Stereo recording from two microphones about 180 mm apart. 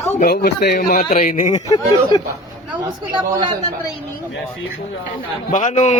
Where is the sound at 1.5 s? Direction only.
20° left (ahead or behind).